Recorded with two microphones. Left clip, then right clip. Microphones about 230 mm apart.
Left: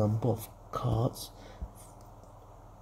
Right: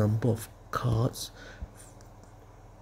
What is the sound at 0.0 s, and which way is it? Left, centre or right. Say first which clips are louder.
Speech: right 1 dB; centre.